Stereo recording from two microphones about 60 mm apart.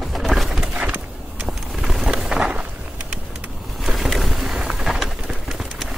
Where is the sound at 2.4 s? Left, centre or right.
Centre.